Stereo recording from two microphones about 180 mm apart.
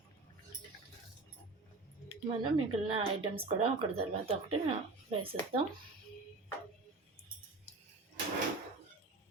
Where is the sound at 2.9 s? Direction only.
30° right (ahead or behind).